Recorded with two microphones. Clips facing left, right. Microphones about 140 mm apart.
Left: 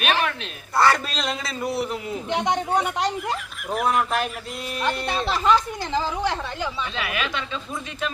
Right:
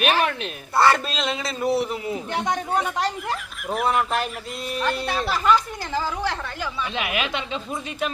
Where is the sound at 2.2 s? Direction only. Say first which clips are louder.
Left 4 dB; 20° left (ahead or behind).